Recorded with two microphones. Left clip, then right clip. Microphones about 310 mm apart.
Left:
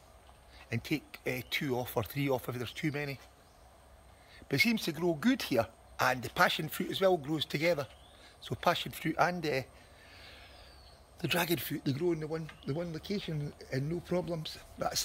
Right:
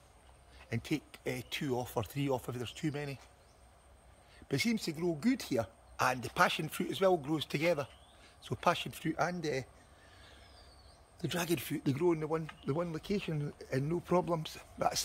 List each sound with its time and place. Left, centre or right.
0.7 s speech: centre
4.4 s speech: centre
10.1 s a sound: centre
11.1 s speech: centre